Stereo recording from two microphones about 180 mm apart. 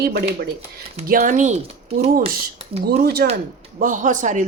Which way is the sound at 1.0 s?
50° right (ahead or behind).